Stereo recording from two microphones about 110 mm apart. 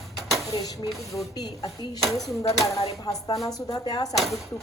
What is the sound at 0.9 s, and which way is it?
Speech, centre (ahead or behind).